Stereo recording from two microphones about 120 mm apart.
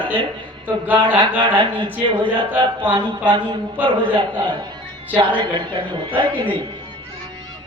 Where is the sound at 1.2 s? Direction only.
40° right (ahead or behind).